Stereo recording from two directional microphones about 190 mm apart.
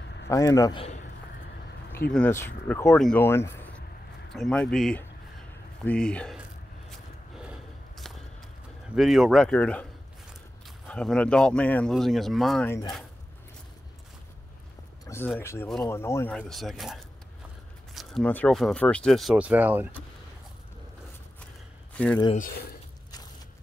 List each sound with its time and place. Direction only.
0.3 s a man's voice: 20° left (ahead or behind)
2.0 s speech: 5° left (ahead or behind)
6.9 s gasp: centre (ahead or behind)
8.9 s speech: centre (ahead or behind)
10.9 s speech: 5° left (ahead or behind)
15.0 s speech: 10° left (ahead or behind); by 20.0 s 10° right (ahead or behind)
21.9 s speech: 5° left (ahead or behind)
22.3 s speech: 50° left (ahead or behind)